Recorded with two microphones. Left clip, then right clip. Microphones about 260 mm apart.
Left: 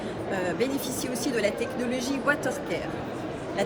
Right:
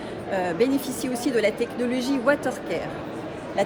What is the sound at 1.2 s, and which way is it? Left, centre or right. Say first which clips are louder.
Speech: right 4 dB; right.